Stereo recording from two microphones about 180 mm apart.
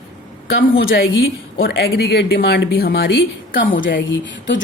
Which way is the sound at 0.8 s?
55° left (ahead or behind).